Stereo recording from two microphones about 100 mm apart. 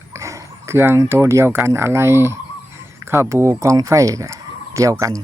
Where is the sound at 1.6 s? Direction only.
25° right (ahead or behind).